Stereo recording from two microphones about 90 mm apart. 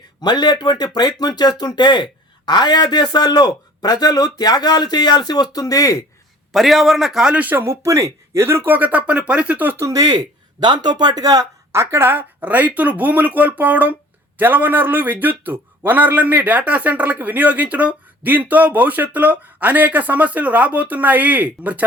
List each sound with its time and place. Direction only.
0.2 s a man's voice: 55° left (ahead or behind)
6.5 s a man's voice: centre (ahead or behind); by 9.7 s 15° right (ahead or behind)
9.7 s a man's voice: 40° right (ahead or behind); by 21.8 s 20° right (ahead or behind)